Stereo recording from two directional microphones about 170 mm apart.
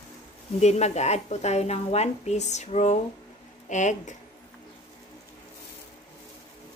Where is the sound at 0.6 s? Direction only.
40° left (ahead or behind).